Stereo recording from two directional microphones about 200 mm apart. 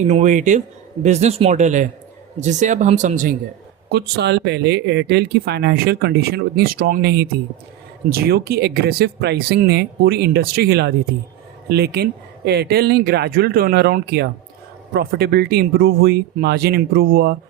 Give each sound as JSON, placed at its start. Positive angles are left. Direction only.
{"t": 0.0, "sound": "speech", "side_deg": -35}
{"t": 3.8, "sound": "speech", "side_deg": -55}